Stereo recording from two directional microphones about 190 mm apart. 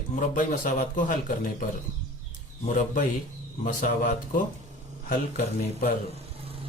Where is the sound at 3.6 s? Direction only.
45° left (ahead or behind).